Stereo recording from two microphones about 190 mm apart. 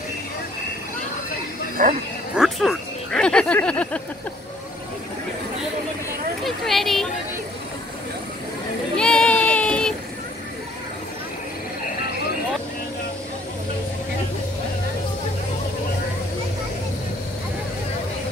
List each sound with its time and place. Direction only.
1.8 s speech: 45° right (ahead or behind)
2.3 s speech: centre (ahead or behind)
6.4 s a sound: centre (ahead or behind)
8.9 s child singing: 5° left (ahead or behind)